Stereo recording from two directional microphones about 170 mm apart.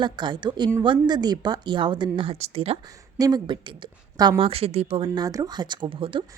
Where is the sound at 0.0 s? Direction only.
25° right (ahead or behind).